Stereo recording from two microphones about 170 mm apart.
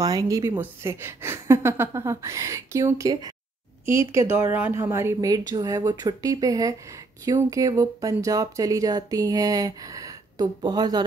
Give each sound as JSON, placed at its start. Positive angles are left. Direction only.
{"t": 0.0, "sound": "a woman's voice", "side_deg": -20}